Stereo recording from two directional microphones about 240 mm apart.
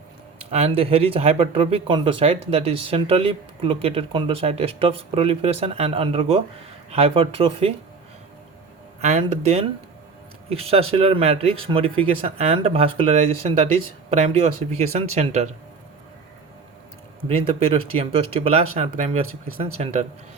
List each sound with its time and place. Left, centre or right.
0.5 s speech: right
9.0 s speech: right
14.8 s speech: right
17.2 s speech: right